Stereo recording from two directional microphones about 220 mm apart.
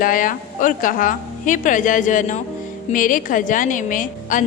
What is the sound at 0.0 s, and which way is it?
A woman's voice, 40° left (ahead or behind).